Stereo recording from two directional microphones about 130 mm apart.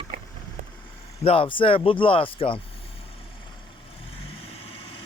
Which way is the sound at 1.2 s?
45° left (ahead or behind).